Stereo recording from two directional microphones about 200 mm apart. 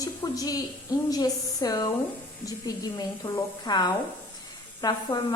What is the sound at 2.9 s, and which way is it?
A woman's voice, 20° left (ahead or behind).